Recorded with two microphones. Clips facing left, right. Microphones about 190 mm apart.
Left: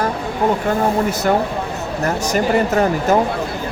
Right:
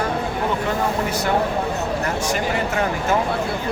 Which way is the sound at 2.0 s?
40° left (ahead or behind).